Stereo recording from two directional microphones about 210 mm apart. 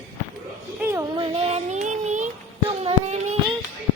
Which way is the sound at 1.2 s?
25° right (ahead or behind).